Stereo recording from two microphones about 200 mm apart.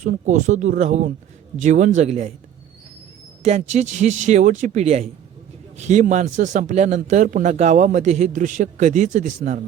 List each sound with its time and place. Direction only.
0.0 s a man's voice: 40° right (ahead or behind)
3.4 s a man's voice: 35° right (ahead or behind)